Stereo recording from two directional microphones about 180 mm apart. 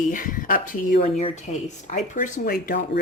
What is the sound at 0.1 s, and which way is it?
Speech, 50° left (ahead or behind).